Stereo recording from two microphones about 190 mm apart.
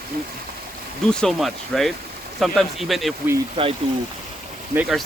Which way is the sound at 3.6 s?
25° right (ahead or behind).